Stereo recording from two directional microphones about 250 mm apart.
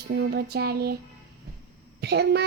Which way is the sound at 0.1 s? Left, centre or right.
Right.